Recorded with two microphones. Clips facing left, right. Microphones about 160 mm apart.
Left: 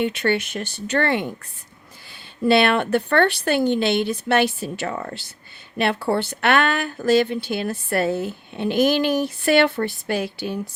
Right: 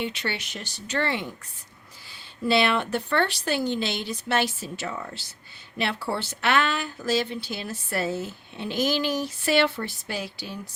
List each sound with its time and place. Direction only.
0.0 s speech: 55° left (ahead or behind)
2.5 s speech: 60° left (ahead or behind)